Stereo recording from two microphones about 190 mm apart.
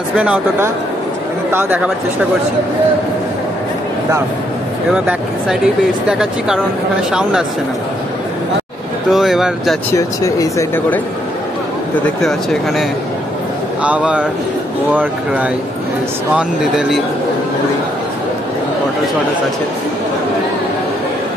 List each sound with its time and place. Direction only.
0.1 s speech: 5° right (ahead or behind)
4.9 s speech: 5° right (ahead or behind)
9.1 s speech: centre (ahead or behind)
9.9 s speech: 15° left (ahead or behind)
12.2 s speech: centre (ahead or behind)
13.8 s speech: 5° right (ahead or behind)